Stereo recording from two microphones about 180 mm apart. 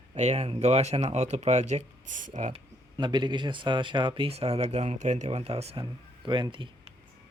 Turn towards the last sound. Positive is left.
turn(degrees=-25)  # may be behind; listen again after turning